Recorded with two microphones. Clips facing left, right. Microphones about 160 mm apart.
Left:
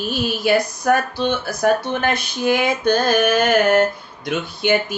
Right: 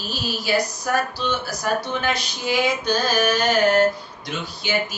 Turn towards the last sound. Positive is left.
turn(degrees=55)  # may be behind; listen again after turning